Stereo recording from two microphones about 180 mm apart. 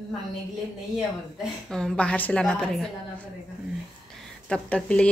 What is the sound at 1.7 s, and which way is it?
A woman's voice, 5° left (ahead or behind).